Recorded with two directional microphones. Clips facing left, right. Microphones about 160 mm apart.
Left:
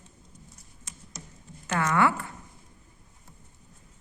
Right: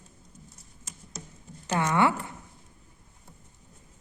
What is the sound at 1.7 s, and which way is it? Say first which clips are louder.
Speech: even; 20° right (ahead or behind).